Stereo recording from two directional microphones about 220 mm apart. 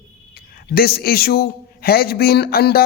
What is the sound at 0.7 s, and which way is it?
Speech, 45° left (ahead or behind).